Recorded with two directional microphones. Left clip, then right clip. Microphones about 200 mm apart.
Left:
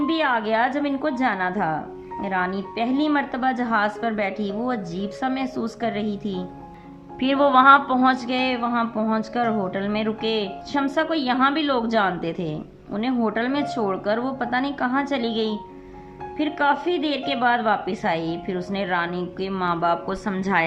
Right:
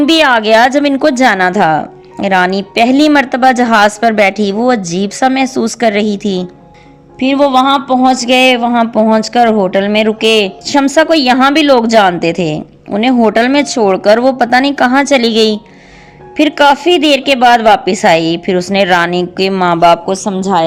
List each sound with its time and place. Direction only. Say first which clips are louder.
0.0 s a woman's voice: right 14 dB; 50° right (ahead or behind)
7.2 s a woman's voice: right 8 dB; 20° right (ahead or behind); by 20.0 s 40° right (ahead or behind)
20.3 s a woman's voice: right 9 dB; 20° right (ahead or behind)